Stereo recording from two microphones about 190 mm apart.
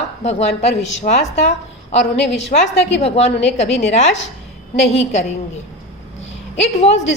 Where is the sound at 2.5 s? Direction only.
45° left (ahead or behind).